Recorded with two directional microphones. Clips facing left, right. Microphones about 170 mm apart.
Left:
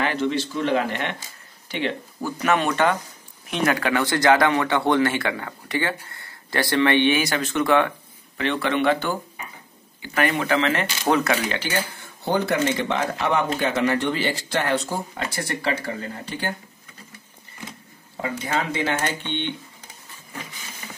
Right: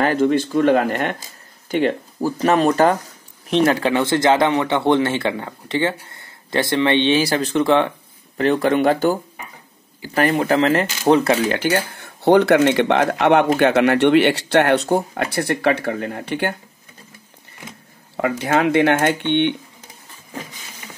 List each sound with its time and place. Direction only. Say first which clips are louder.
0.0 s speech: right 7 dB; 45° right (ahead or behind); by 7.9 s 25° right (ahead or behind)
8.4 s speech: right 6 dB; 40° right (ahead or behind)
11.5 s speech: right 7 dB; 55° right (ahead or behind)
18.1 s speech: right 7 dB; 70° right (ahead or behind)